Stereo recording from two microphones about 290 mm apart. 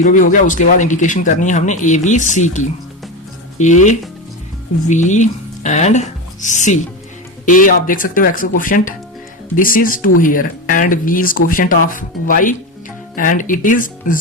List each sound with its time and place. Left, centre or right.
0.0 s speech: left